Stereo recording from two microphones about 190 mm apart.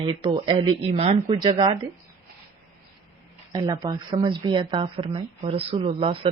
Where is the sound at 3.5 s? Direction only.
20° right (ahead or behind).